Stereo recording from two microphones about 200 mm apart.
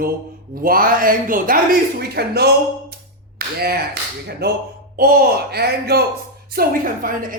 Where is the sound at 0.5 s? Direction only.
45° right (ahead or behind).